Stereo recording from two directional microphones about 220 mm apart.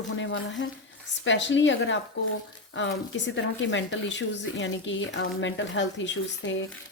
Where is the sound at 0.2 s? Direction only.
60° left (ahead or behind).